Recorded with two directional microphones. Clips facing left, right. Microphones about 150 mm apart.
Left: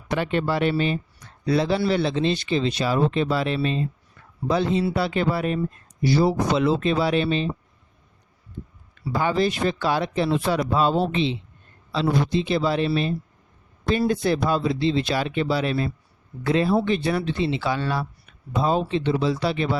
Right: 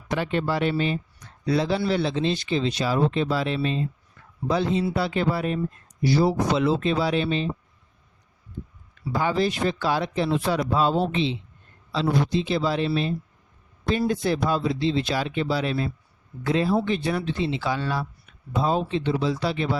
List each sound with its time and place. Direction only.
0.1 s speech: 65° left (ahead or behind)
9.1 s speech: 60° left (ahead or behind)